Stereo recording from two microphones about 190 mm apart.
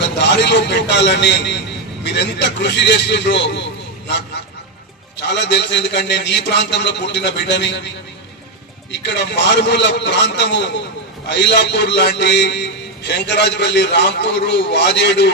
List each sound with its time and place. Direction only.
0.0 s a man's voice: 65° left (ahead or behind)
5.3 s a man's voice: 65° left (ahead or behind)
9.0 s a man's voice: 65° left (ahead or behind)